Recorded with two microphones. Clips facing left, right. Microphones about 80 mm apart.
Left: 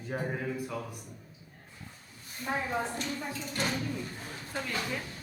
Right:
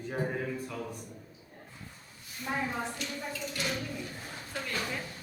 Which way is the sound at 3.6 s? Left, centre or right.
Left.